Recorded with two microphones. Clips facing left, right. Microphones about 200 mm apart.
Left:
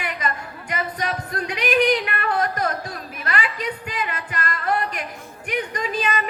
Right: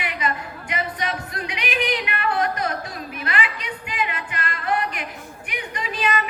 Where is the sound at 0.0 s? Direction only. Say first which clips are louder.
Right 1 dB; 45° left (ahead or behind).